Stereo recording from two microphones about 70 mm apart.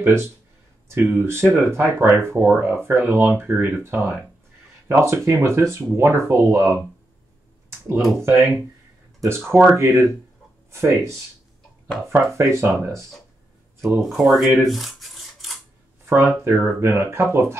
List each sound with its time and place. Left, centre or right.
0.8 s speech: right
8.2 s speech: right
14.0 s speech: centre
14.6 s cutlery: centre
16.1 s speech: right